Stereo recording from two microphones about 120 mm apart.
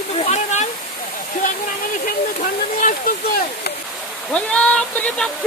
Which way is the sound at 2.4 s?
90° left.